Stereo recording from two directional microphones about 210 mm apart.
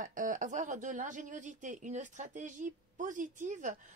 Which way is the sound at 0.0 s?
40° right (ahead or behind).